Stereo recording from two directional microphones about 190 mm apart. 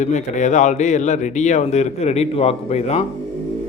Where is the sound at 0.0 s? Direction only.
40° left (ahead or behind).